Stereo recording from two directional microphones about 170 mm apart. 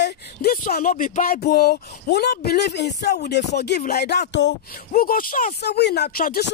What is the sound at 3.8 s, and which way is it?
Speech, 70° left (ahead or behind).